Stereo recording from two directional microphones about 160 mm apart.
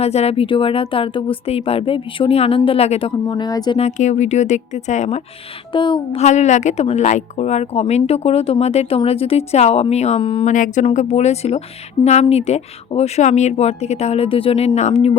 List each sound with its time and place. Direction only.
0.0 s speech: 40° left (ahead or behind)
3.2 s speech: 25° left (ahead or behind)
3.8 s speech: 45° left (ahead or behind)
5.7 s speech: 30° left (ahead or behind)
6.2 s speech: 45° left (ahead or behind)
10.4 s speech: 50° left (ahead or behind)